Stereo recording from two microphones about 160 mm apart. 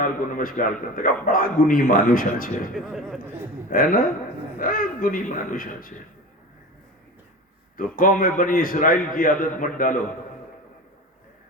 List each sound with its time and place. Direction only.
0.0 s a man's voice: 60° left (ahead or behind)
2.7 s speech: centre (ahead or behind)
3.7 s a man's voice: 60° left (ahead or behind)
7.8 s a man's voice: 60° left (ahead or behind)